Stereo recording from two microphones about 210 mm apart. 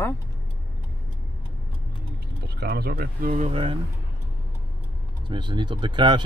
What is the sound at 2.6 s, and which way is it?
Speech, 45° right (ahead or behind).